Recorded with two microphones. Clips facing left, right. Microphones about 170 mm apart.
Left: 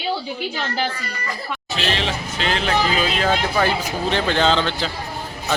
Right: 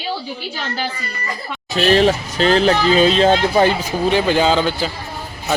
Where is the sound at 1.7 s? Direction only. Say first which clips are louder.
Right 11 dB; 45° right (ahead or behind); by 3.7 s 25° right (ahead or behind).